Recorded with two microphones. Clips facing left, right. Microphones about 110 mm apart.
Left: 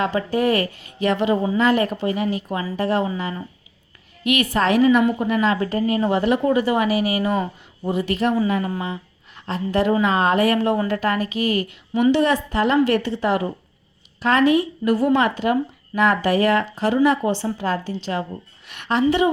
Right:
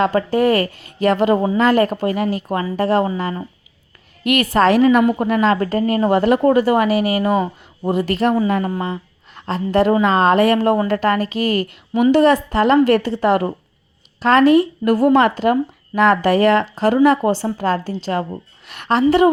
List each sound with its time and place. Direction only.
0.0 s a woman's voice: 40° right (ahead or behind)
2.6 s a woman's voice: 35° right (ahead or behind)
6.8 s a woman's voice: 30° right (ahead or behind)
14.2 s speech: 35° right (ahead or behind)
14.8 s a woman's voice: 50° right (ahead or behind); by 16.9 s 30° right (ahead or behind)
16.9 s a woman's voice: 45° right (ahead or behind)